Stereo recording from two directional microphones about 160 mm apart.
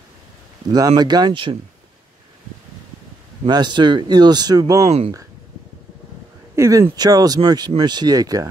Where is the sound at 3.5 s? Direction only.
30° right (ahead or behind).